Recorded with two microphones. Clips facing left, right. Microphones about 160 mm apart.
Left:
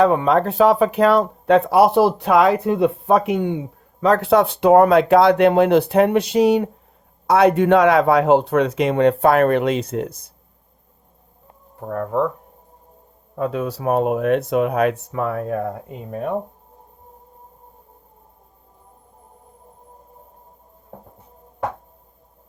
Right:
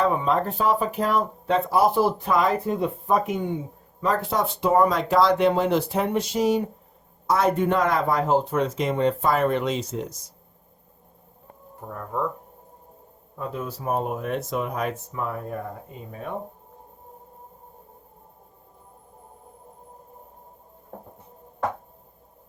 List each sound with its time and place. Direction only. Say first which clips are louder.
0.0 s speech: left 7 dB; 70° left (ahead or behind)
11.9 s speech: left 9 dB; 75° left (ahead or behind)
13.4 s speech: left 8 dB; 75° left (ahead or behind)